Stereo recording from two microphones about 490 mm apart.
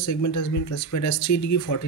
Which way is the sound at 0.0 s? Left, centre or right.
Left.